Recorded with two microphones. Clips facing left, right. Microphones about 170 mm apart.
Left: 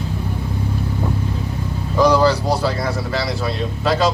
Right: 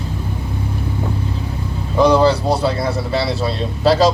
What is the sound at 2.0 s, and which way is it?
Speech, 25° right (ahead or behind).